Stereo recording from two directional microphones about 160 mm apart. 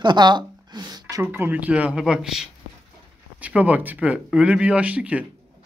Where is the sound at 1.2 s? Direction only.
10° right (ahead or behind).